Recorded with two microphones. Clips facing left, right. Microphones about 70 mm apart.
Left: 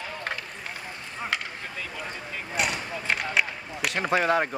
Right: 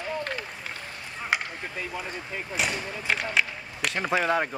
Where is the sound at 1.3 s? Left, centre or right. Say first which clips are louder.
Right 4 dB; centre.